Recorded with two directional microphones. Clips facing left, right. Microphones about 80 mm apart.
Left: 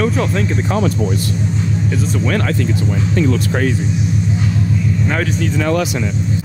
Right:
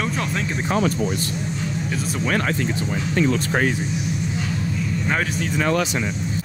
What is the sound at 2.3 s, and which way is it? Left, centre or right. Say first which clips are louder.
Speech: left 1 dB; centre.